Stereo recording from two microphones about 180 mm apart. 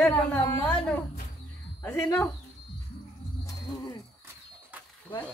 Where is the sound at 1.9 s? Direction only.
15° left (ahead or behind).